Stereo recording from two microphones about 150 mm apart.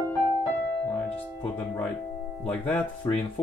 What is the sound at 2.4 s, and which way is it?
Speech, 10° left (ahead or behind).